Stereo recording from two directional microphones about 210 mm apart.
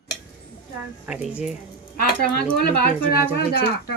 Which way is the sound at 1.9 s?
45° left (ahead or behind).